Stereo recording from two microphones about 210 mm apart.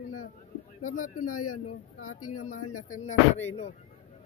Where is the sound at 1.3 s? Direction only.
90° left.